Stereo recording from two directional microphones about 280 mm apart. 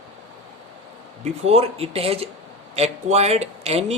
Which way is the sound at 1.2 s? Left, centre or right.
Right.